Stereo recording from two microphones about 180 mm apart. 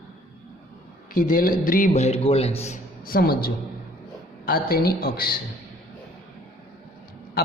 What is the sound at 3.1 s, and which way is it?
A man's voice, 55° left (ahead or behind).